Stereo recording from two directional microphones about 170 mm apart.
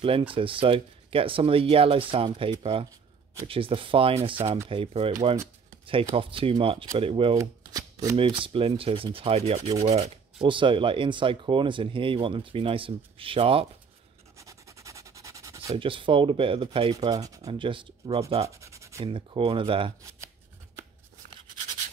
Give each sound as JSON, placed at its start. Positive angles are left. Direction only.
{"t": 0.3, "sound": "speech", "side_deg": -30}
{"t": 6.1, "sound": "speech", "side_deg": -30}
{"t": 7.3, "sound": "speech", "side_deg": -20}
{"t": 14.3, "sound": "dog", "side_deg": -20}
{"t": 15.7, "sound": "speech", "side_deg": -30}
{"t": 18.5, "sound": "a sound", "side_deg": -15}
{"t": 19.0, "sound": "speech", "side_deg": -30}